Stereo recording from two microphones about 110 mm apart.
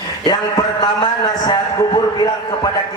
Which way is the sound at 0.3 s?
40° left (ahead or behind).